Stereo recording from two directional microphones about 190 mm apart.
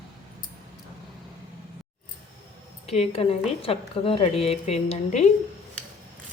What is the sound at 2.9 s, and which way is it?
A woman's voice, 30° left (ahead or behind).